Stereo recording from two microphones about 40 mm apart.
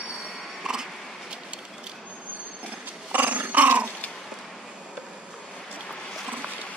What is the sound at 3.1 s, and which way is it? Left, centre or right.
Dog, right.